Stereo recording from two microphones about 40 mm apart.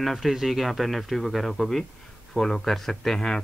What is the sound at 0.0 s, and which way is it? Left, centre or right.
A man's voice, centre.